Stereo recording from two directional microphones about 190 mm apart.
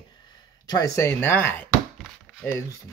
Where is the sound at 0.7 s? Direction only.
15° left (ahead or behind).